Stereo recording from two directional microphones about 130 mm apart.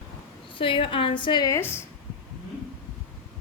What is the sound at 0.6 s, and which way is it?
Speech, 45° left (ahead or behind).